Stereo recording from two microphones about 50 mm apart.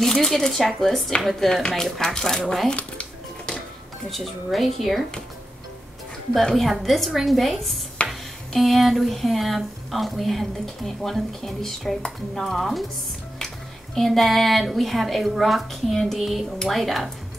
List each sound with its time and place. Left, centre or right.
0.0 s speech: centre
2.7 s music: left
4.1 s speech: centre
6.3 s speech: centre
13.9 s speech: centre